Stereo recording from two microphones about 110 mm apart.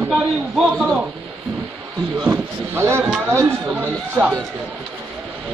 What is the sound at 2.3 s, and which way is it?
Speech, 20° right (ahead or behind).